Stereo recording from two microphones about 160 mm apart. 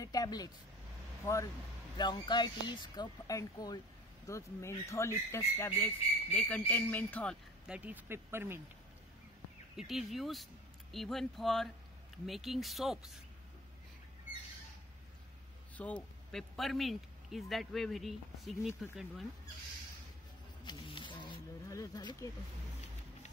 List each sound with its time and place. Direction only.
0.0 s a sound: 25° left (ahead or behind)
1.2 s speech: 20° left (ahead or behind)
7.6 s speech: 10° right (ahead or behind)
9.8 s a man's voice: centre (ahead or behind)
15.8 s a man's voice: 5° left (ahead or behind)
20.6 s a sound: 30° left (ahead or behind)